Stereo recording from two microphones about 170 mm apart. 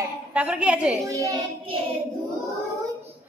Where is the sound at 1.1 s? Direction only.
20° right (ahead or behind).